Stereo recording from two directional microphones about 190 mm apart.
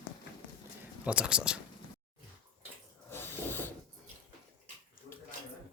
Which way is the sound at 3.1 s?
10° left (ahead or behind).